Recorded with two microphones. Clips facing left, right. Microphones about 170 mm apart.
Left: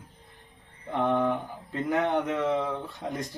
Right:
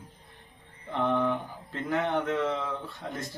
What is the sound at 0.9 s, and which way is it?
Speech, 15° left (ahead or behind).